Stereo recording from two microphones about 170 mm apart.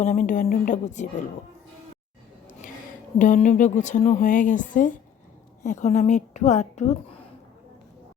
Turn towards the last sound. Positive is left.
turn(degrees=40)  # may be behind; listen again after turning